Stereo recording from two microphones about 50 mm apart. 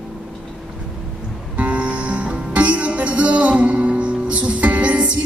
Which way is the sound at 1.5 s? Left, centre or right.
Right.